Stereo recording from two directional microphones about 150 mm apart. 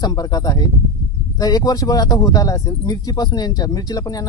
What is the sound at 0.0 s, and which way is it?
Speech, 25° left (ahead or behind).